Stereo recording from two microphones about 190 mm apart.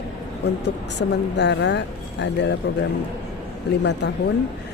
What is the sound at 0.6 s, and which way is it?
Speech, 65° left (ahead or behind).